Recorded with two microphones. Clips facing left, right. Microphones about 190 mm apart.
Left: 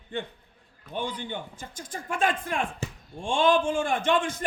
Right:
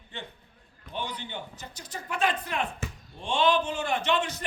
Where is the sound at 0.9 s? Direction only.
50° left (ahead or behind).